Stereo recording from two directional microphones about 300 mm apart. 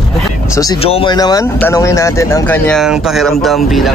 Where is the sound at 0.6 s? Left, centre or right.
Centre.